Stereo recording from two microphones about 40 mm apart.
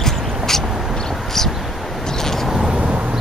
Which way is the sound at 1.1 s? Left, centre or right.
Centre.